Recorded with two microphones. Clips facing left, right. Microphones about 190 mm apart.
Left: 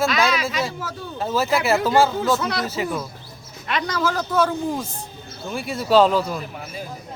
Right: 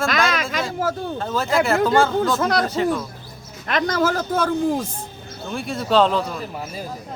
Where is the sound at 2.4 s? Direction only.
50° right (ahead or behind).